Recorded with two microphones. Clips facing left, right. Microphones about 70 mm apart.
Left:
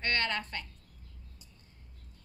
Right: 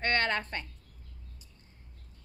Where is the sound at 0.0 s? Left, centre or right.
Right.